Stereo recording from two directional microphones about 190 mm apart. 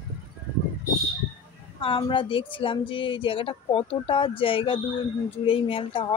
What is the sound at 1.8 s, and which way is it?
Speech, 25° left (ahead or behind).